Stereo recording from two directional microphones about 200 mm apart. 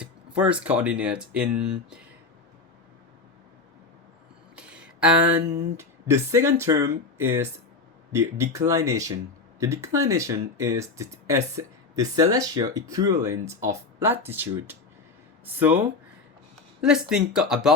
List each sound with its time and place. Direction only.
0.0 s speech: 5° right (ahead or behind)
4.5 s speech: 5° right (ahead or behind)
16.8 s speech: 5° right (ahead or behind)